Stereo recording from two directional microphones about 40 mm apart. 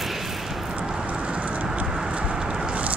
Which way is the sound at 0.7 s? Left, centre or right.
Right.